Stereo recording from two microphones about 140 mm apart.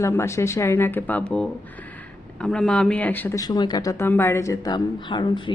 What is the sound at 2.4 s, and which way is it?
Speech, 5° left (ahead or behind).